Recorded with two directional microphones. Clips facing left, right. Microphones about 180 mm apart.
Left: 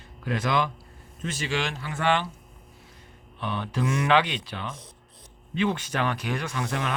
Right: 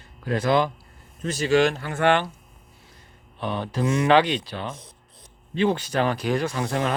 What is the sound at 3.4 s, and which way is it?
A man's voice, 35° right (ahead or behind).